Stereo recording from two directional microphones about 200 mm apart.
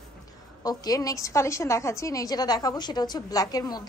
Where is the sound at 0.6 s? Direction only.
20° left (ahead or behind).